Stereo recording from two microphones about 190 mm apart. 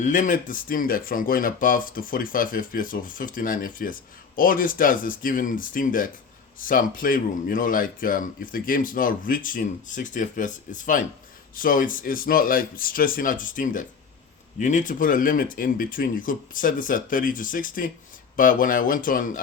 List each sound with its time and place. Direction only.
0.0 s speech: 45° left (ahead or behind)